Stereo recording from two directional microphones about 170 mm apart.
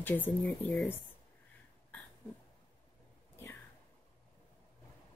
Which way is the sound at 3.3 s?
15° left (ahead or behind).